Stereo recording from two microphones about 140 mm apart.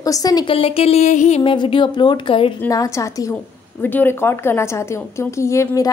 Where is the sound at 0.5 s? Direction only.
45° left (ahead or behind).